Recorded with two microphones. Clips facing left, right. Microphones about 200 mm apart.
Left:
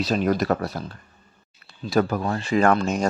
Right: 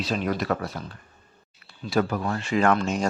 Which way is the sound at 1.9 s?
35° left (ahead or behind).